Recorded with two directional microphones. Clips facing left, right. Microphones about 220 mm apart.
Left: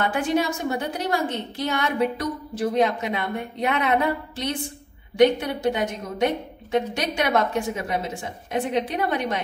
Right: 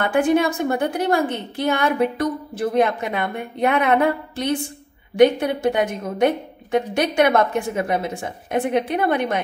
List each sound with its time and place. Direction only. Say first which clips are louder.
0.0 s a woman's voice: right 5 dB; 55° right (ahead or behind)